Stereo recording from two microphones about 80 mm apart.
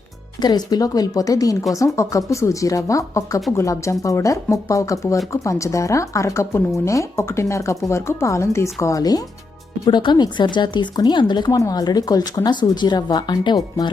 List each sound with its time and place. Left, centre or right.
0.4 s speech: left
9.9 s speech: left